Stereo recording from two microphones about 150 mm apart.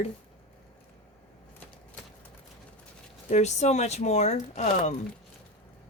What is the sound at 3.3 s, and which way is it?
Speech, 50° left (ahead or behind).